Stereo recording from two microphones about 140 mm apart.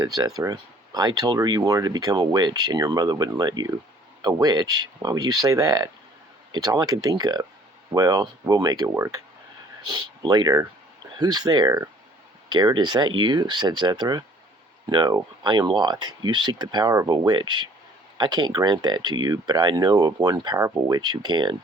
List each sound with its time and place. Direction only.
0.0 s speech: 25° right (ahead or behind)